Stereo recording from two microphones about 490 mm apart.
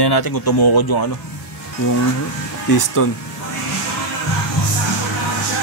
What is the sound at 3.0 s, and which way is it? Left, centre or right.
Speech, left.